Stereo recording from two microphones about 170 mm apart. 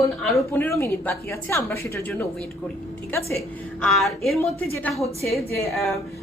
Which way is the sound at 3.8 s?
Centre (ahead or behind).